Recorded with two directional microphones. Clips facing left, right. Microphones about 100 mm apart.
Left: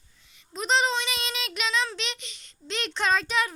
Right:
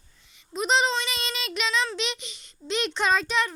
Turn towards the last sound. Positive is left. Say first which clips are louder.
# right 1 dB
turn(degrees=5)  # may be behind; listen again after turning